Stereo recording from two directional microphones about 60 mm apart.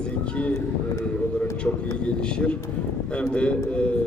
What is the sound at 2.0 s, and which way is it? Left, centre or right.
A man's voice, centre.